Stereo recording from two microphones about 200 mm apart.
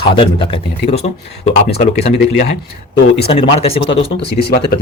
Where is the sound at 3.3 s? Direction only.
30° left (ahead or behind).